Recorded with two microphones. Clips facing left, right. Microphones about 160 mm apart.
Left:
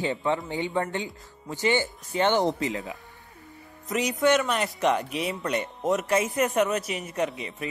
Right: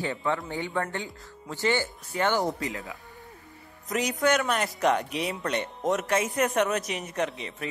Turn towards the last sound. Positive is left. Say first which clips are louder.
# left 1 dB
turn(degrees=0)  # may be behind; listen again after turning